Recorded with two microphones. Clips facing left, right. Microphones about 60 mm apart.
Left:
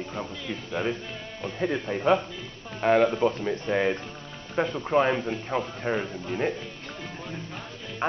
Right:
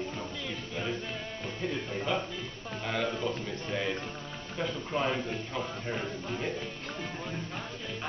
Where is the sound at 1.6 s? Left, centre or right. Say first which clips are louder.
Left 8 dB; left.